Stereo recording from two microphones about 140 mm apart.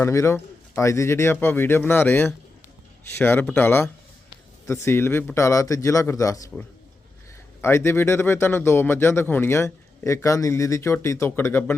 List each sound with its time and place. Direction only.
0.0 s a man's voice: 20° left (ahead or behind)
7.6 s speech: 20° left (ahead or behind)